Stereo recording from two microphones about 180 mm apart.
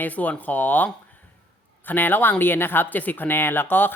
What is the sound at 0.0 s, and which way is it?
A woman's voice, 10° left (ahead or behind).